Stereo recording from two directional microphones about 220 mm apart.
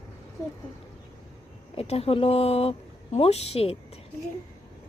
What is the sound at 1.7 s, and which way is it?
Speech, 25° left (ahead or behind).